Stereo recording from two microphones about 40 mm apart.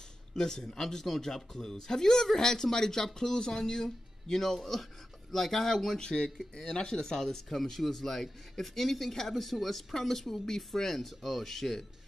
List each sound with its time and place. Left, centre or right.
0.4 s speech: centre